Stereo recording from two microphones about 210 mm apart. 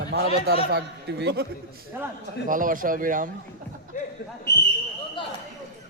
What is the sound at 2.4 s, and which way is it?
Speech, 40° right (ahead or behind).